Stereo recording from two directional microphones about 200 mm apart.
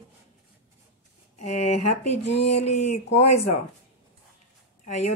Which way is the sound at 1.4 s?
35° left (ahead or behind).